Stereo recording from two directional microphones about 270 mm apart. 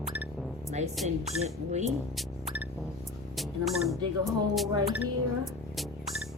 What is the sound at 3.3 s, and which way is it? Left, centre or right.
Speech, centre.